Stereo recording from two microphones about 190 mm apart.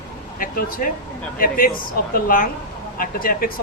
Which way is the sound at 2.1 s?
45° left (ahead or behind).